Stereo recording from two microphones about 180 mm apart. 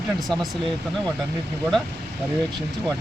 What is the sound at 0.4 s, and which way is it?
Speech, centre (ahead or behind).